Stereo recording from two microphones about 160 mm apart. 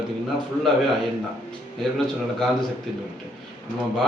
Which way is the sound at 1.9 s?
Centre (ahead or behind).